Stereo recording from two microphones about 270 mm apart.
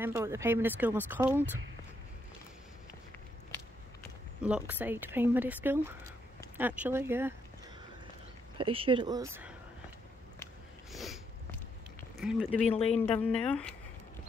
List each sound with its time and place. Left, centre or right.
0.0 s speech: centre
4.4 s speech: centre
8.5 s speech: centre
10.4 s biting: centre
12.2 s speech: centre
12.6 s speech: left
13.1 s speech: centre